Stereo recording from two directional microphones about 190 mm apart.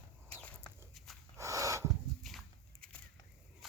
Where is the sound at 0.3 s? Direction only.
5° left (ahead or behind).